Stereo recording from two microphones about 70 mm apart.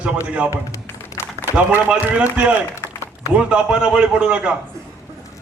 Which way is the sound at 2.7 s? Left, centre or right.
Left.